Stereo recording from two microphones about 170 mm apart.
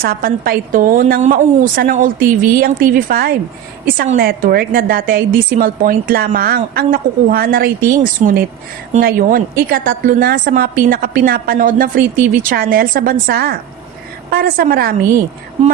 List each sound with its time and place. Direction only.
0.0 s a woman's voice: 60° right (ahead or behind)
8.2 s speech: 45° right (ahead or behind)
9.0 s a woman's voice: 60° right (ahead or behind)
15.6 s speech: 40° right (ahead or behind)